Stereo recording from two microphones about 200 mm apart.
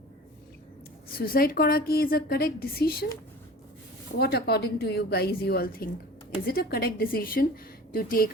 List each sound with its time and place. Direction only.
1.0 s a woman's voice: 50° left (ahead or behind)
4.2 s a woman's voice: 50° left (ahead or behind)